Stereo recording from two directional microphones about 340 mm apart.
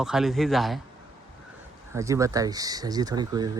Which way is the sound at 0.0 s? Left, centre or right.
Centre.